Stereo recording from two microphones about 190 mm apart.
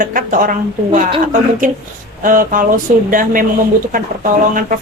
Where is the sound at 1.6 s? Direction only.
45° right (ahead or behind).